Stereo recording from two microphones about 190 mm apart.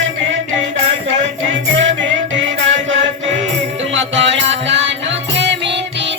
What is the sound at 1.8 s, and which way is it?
Music, 75° right (ahead or behind).